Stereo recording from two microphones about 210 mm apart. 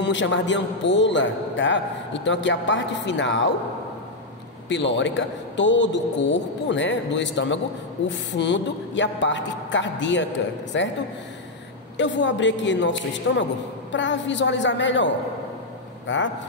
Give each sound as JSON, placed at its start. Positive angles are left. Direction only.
{"t": 0.0, "sound": "a man's voice", "side_deg": 60}
{"t": 4.6, "sound": "a man's voice", "side_deg": 60}
{"t": 12.0, "sound": "a man's voice", "side_deg": 60}